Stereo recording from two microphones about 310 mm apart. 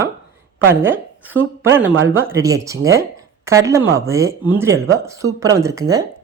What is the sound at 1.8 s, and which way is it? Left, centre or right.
Speech, right.